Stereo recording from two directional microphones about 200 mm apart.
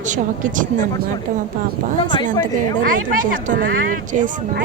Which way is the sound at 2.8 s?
45° right (ahead or behind).